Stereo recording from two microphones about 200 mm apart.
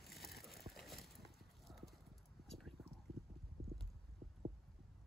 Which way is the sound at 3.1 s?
25° right (ahead or behind).